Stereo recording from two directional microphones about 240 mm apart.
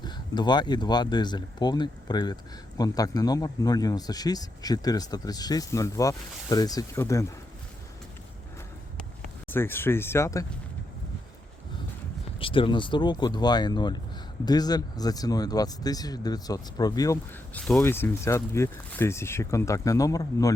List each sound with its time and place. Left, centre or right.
0.0 s speech: centre
9.5 s speech: centre
12.4 s speech: left